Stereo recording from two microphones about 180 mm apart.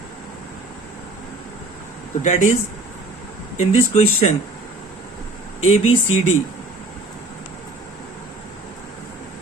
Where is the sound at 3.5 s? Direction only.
35° left (ahead or behind).